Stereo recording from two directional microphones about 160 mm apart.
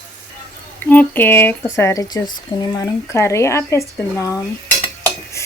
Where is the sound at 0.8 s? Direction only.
10° left (ahead or behind).